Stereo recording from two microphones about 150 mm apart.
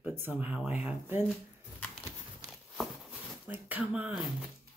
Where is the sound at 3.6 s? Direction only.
10° right (ahead or behind).